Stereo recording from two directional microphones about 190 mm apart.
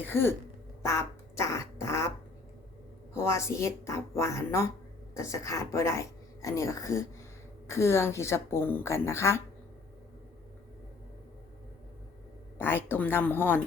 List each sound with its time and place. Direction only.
0.0 s speech: 10° left (ahead or behind)
0.8 s quack: 15° left (ahead or behind)
3.2 s speech: 15° left (ahead or behind)
12.5 s speech: 10° left (ahead or behind)